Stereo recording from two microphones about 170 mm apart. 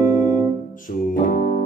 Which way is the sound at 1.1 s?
55° left (ahead or behind).